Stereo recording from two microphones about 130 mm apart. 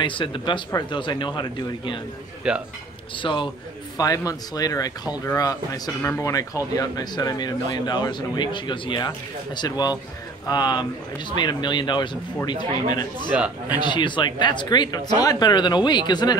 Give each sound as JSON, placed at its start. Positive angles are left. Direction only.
{"t": 0.0, "sound": "speech", "side_deg": 40}
{"t": 2.4, "sound": "speech", "side_deg": -5}
{"t": 3.2, "sound": "speech", "side_deg": 40}
{"t": 4.0, "sound": "speech", "side_deg": 25}